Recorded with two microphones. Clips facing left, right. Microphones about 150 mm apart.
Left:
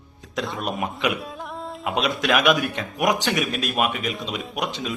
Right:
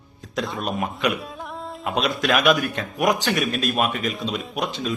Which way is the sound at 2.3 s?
5° left (ahead or behind).